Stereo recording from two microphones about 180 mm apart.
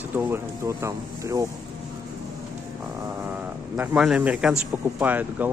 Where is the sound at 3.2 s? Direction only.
10° right (ahead or behind).